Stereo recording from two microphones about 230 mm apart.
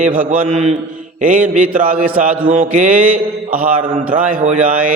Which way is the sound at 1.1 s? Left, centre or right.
Right.